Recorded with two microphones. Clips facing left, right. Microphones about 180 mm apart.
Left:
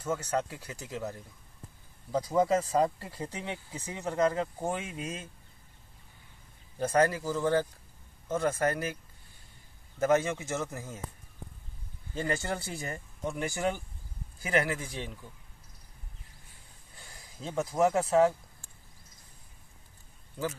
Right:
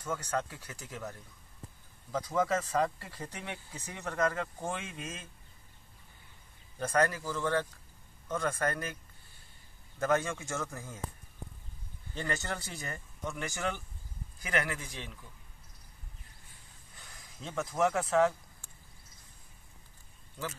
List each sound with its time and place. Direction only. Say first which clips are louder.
0.1 s speech: left 4 dB; 15° left (ahead or behind)
2.3 s a man's voice: left 4 dB; 30° left (ahead or behind)
3.7 s speech: left 5 dB; 10° left (ahead or behind)
4.2 s a man's voice: left 4 dB; 25° left (ahead or behind)
6.9 s a man's voice: left 3 dB; 20° left (ahead or behind)
9.9 s a man's voice: left 4 dB; 20° left (ahead or behind)
12.3 s speech: left 4 dB; 30° left (ahead or behind)
13.6 s speech: left 4 dB; 15° left (ahead or behind)
14.4 s a man's voice: left 5 dB; 30° left (ahead or behind)
17.0 s speech: left 4 dB; 30° left (ahead or behind)